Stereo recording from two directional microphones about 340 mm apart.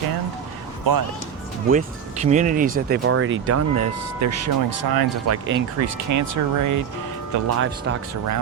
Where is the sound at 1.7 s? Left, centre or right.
Right.